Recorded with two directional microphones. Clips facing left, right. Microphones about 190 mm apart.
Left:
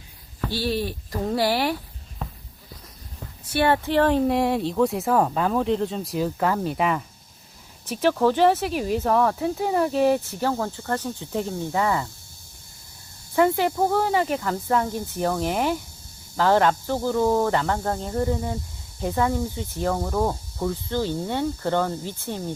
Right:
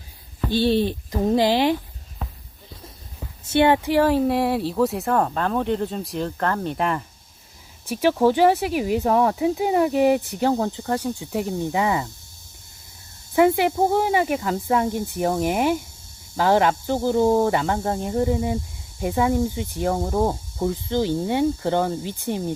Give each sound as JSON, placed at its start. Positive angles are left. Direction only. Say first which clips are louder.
{"t": 0.4, "sound": "speech", "louder": "right 6 dB", "side_deg": -25}
{"t": 3.4, "sound": "speech", "louder": "right 4 dB", "side_deg": -20}
{"t": 7.9, "sound": "speech", "louder": "right 2 dB", "side_deg": -10}
{"t": 13.3, "sound": "speech", "louder": "right 3 dB", "side_deg": -15}
{"t": 17.5, "sound": "speech", "louder": "right 1 dB", "side_deg": -10}